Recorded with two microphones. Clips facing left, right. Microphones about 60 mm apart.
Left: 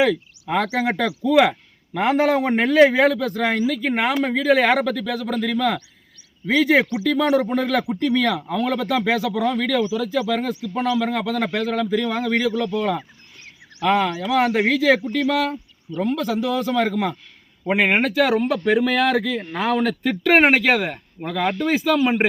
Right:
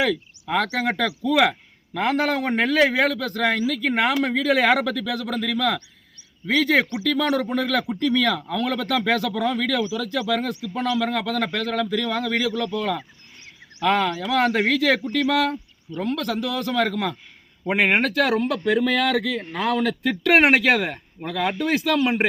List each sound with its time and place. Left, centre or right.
0.0 s speech: centre
2.4 s a man's voice: centre
15.3 s a man's voice: centre
17.7 s a man's voice: centre